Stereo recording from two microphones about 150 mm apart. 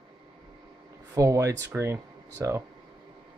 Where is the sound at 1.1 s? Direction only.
20° right (ahead or behind).